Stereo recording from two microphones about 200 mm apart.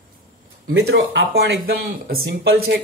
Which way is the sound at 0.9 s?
60° right (ahead or behind).